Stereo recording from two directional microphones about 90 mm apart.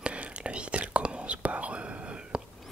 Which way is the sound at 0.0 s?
15° right (ahead or behind).